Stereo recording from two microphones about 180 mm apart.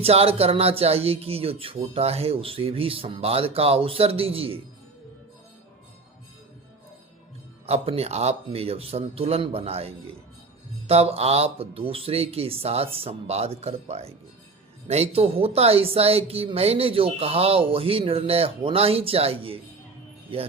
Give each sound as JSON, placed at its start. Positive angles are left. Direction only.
{"t": 0.0, "sound": "speech", "side_deg": -35}
{"t": 7.7, "sound": "speech", "side_deg": -35}